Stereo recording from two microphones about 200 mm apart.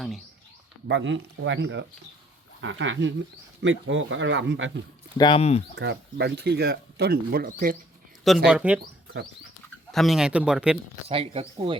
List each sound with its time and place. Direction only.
0.9 s speech: 65° right (ahead or behind)
5.1 s speech: 25° left (ahead or behind)
5.7 s speech: 60° right (ahead or behind); by 7.8 s 45° right (ahead or behind)
8.4 s speech: 5° right (ahead or behind)
9.9 s speech: centre (ahead or behind)
11.1 s speech: 30° right (ahead or behind)